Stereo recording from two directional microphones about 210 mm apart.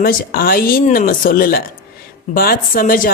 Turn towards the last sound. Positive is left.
turn(degrees=40)  # may be behind; listen again after turning